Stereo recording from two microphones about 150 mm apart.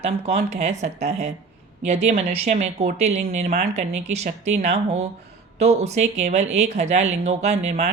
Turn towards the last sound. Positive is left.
turn(degrees=-45)  # may be behind; listen again after turning